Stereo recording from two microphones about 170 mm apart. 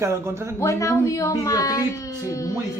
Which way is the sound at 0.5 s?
15° left (ahead or behind).